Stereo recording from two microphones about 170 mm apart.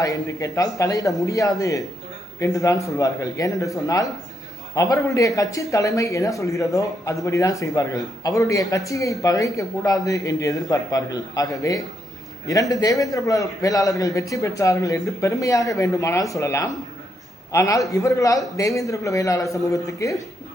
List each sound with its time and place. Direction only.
0.0 s a man's voice: 20° left (ahead or behind)